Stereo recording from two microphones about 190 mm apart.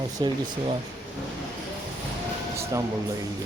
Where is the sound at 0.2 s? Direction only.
25° right (ahead or behind).